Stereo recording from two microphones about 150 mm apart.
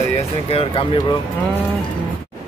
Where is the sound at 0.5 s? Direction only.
40° left (ahead or behind).